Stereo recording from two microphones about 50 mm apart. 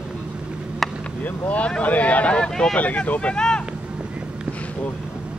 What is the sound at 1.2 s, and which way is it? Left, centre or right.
Speech, left.